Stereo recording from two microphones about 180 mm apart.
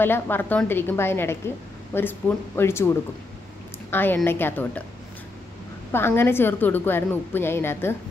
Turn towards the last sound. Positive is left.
turn(degrees=10)  # may be behind; listen again after turning